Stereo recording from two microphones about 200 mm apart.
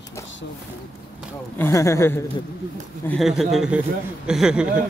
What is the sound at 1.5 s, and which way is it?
Speech, 10° left (ahead or behind).